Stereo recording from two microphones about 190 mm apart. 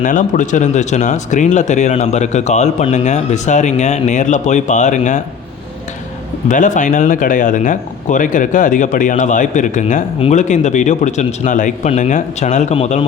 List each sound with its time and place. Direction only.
0.0 s speech: 45° left (ahead or behind)
6.5 s speech: 40° left (ahead or behind)